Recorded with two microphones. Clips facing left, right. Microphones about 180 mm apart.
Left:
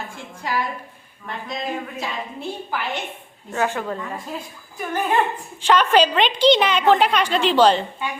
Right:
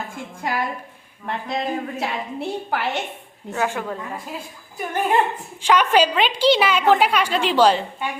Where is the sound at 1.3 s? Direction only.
65° right (ahead or behind).